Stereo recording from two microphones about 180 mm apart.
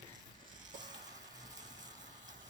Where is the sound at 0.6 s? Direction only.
25° right (ahead or behind).